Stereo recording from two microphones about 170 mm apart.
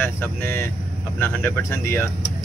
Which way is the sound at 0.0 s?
10° left (ahead or behind).